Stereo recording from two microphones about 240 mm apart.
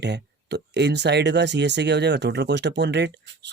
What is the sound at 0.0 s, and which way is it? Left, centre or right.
Speech, right.